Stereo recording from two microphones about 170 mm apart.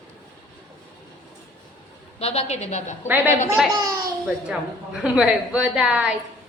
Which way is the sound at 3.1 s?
10° right (ahead or behind).